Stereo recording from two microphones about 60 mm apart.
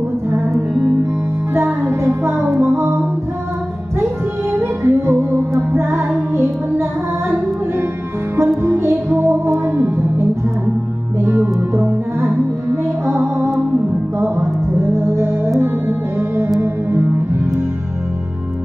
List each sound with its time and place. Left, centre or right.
1.5 s music: right
4.0 s music: right
8.4 s music: right